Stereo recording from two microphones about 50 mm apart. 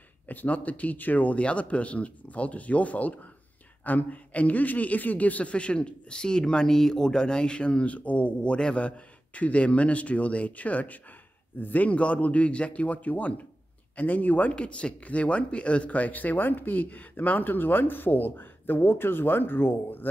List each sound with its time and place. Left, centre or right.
0.3 s a man's voice: left
14.5 s speech: left